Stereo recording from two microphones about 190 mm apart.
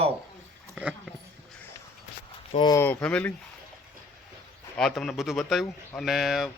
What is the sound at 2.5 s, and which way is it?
Speech, 25° left (ahead or behind).